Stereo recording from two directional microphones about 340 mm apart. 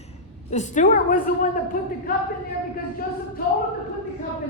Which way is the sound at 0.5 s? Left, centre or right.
Left.